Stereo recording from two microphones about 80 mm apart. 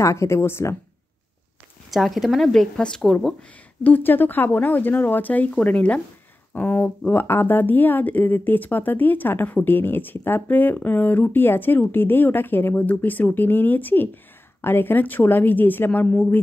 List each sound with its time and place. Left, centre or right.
0.0 s speech: left
1.9 s speech: centre
3.8 s speech: left